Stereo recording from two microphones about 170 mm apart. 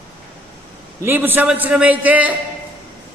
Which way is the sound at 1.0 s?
10° right (ahead or behind).